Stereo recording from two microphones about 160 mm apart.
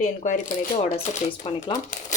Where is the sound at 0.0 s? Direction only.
55° left (ahead or behind).